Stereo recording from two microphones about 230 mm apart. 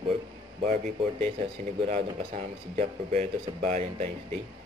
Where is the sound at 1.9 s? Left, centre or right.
Right.